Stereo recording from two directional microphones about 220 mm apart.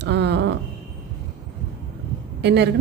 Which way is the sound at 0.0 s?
50° right (ahead or behind).